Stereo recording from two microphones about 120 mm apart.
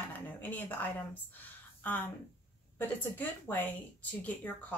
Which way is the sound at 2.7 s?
15° left (ahead or behind).